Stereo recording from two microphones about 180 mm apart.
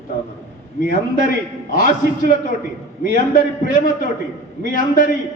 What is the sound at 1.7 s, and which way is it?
A man's voice, 50° left (ahead or behind).